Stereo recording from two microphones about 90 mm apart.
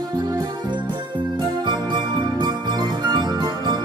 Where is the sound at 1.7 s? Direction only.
55° right (ahead or behind).